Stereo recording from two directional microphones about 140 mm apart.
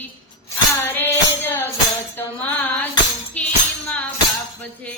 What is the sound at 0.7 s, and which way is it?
Music, 15° left (ahead or behind).